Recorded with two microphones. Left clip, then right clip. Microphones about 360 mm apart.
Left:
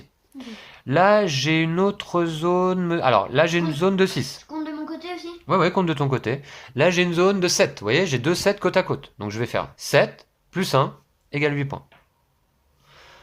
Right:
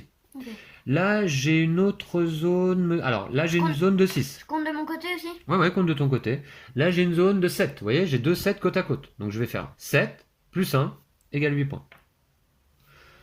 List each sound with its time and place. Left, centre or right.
0.3 s speech: centre
4.6 s a sound: right
5.5 s speech: centre